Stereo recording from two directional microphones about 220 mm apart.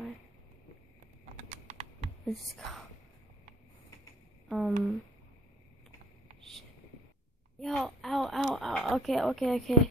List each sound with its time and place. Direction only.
1.3 s typing: 35° right (ahead or behind)
2.2 s speech: centre (ahead or behind)
4.5 s speech: centre (ahead or behind)
7.6 s speech: 5° left (ahead or behind)